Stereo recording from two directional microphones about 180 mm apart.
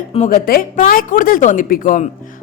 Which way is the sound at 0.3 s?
50° left (ahead or behind).